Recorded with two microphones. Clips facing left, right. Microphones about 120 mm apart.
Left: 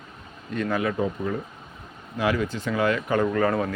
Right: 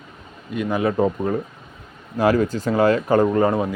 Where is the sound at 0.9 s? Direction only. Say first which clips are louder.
Right 6 dB; 45° right (ahead or behind).